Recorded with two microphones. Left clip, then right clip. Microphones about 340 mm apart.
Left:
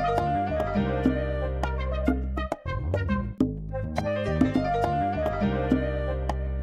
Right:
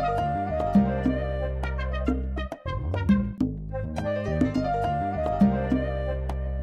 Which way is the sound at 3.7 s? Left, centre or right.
Centre.